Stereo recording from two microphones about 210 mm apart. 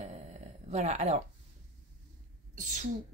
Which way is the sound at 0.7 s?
30° right (ahead or behind).